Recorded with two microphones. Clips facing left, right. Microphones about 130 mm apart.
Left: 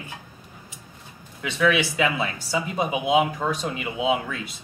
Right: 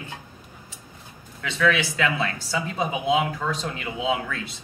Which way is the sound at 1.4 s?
15° left (ahead or behind).